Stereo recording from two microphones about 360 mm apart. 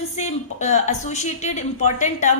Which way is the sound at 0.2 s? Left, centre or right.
Centre.